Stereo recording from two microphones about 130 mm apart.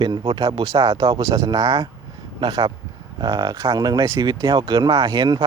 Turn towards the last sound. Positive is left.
turn(degrees=-35)  # may be behind; listen again after turning